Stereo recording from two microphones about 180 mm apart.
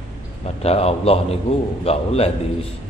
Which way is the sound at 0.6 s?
35° left (ahead or behind).